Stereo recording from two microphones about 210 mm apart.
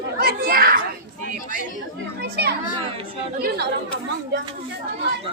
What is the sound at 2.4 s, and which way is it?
Speech, 50° right (ahead or behind).